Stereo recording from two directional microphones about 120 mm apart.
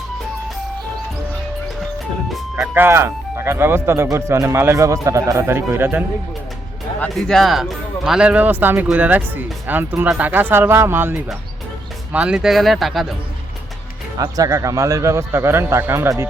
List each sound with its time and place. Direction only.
2.7 s speech: 20° right (ahead or behind)
7.1 s speech: centre (ahead or behind)
14.2 s speech: 30° right (ahead or behind)